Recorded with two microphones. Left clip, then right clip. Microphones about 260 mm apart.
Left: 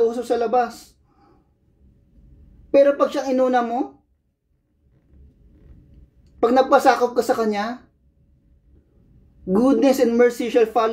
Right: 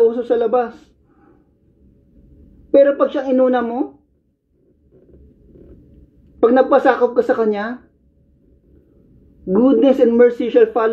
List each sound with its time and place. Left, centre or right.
0.0 s a sound: left
2.9 s speech: left
6.4 s speech: left
9.5 s speech: left